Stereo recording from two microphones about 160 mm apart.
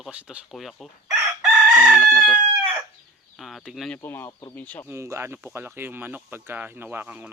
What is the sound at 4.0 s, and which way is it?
Speech, 15° left (ahead or behind).